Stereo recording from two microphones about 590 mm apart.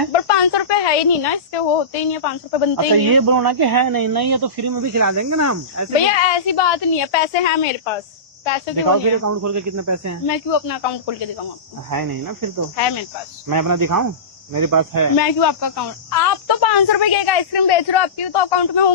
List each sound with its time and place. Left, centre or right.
0.1 s a woman's voice: left
2.7 s speech: right
6.1 s a woman's voice: left
8.7 s speech: right
10.2 s speech: left
11.9 s speech: right
13.5 s speech: right
15.2 s speech: left